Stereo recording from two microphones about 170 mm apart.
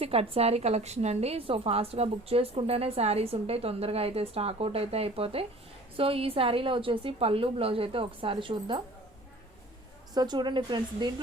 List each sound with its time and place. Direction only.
0.0 s a woman's voice: 35° right (ahead or behind)
10.2 s speech: 25° right (ahead or behind)